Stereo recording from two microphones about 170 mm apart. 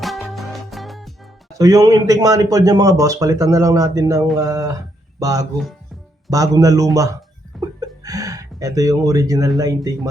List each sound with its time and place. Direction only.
0.0 s music: centre (ahead or behind)
1.5 s speech: 20° right (ahead or behind)
7.8 s a sound: 20° right (ahead or behind)
9.6 s speech: 20° right (ahead or behind)